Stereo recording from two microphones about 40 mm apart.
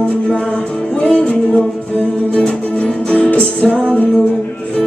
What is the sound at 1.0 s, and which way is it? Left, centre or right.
Music, left.